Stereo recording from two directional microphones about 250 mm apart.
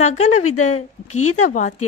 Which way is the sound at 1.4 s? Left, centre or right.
Left.